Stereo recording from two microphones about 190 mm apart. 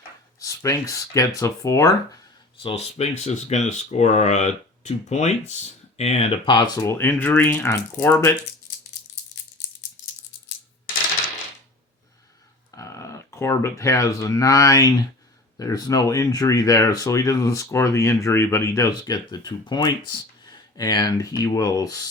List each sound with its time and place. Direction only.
0.3 s speech: 15° left (ahead or behind)
2.6 s speech: 30° left (ahead or behind); by 8.3 s 10° left (ahead or behind)
12.7 s speech: 15° left (ahead or behind)